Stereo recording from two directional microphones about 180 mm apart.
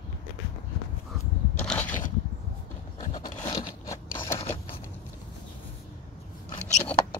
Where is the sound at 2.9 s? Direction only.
20° left (ahead or behind).